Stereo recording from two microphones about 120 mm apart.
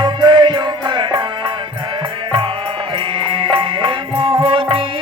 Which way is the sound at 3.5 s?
45° right (ahead or behind).